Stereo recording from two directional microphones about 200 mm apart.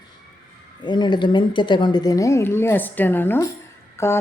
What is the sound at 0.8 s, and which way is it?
A woman's voice, 20° left (ahead or behind).